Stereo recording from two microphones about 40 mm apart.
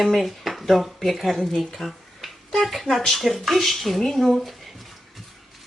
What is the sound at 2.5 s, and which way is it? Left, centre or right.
Speech, centre.